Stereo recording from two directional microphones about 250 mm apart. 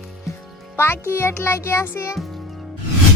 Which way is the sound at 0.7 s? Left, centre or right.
Centre.